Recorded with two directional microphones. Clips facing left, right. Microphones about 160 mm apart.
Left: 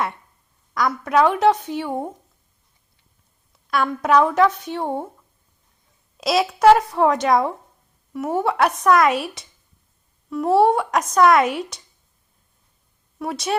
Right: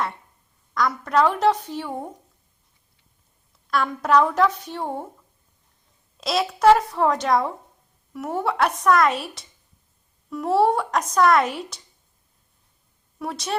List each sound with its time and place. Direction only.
0.7 s speech: 5° left (ahead or behind)
3.7 s speech: centre (ahead or behind)
4.8 s speech: 20° left (ahead or behind)
6.1 s speech: 5° left (ahead or behind)
13.1 s a woman's voice: 5° left (ahead or behind)